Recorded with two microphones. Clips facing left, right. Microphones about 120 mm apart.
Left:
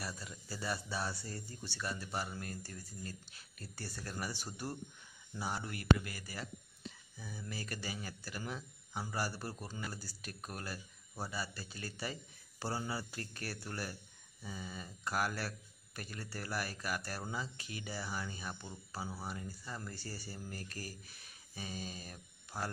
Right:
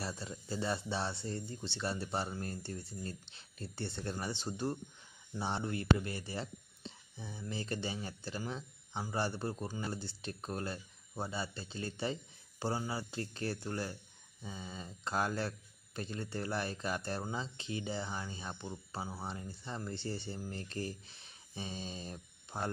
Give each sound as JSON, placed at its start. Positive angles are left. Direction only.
{"t": 0.0, "sound": "speech", "side_deg": -25}